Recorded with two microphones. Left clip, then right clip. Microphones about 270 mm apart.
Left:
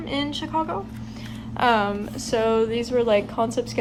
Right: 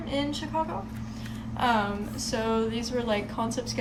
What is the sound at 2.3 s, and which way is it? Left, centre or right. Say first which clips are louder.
Speech: left 7 dB; left.